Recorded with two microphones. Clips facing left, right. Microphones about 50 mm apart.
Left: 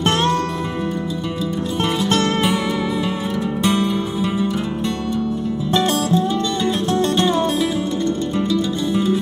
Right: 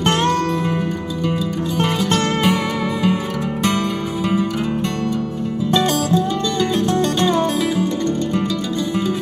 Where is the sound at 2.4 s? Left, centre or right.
Right.